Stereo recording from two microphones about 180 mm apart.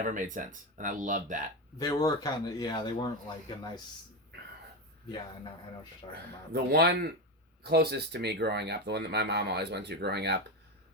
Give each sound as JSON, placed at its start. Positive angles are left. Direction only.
{"t": 0.0, "sound": "speech", "side_deg": -45}
{"t": 1.8, "sound": "speech", "side_deg": 20}
{"t": 6.5, "sound": "speech", "side_deg": -65}